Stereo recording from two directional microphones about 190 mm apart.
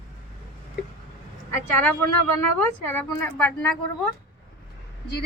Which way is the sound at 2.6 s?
10° left (ahead or behind).